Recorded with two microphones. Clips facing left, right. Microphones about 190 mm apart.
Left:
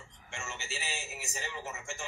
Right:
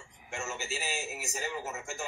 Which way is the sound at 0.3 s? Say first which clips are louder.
Right 5 dB; 35° right (ahead or behind).